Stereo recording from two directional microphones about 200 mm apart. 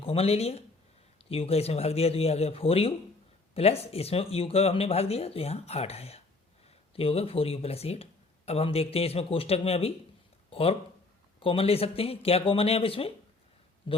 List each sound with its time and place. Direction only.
0.0 s speech: 30° left (ahead or behind)